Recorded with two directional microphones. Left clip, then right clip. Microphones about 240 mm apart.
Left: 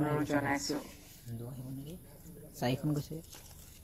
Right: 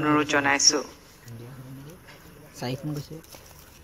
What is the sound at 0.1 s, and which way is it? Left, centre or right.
Speech, right.